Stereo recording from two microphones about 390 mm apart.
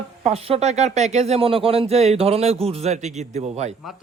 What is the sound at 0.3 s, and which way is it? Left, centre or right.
Speech, centre.